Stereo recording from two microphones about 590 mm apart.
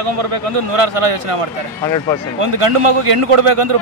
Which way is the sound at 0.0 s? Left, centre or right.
Right.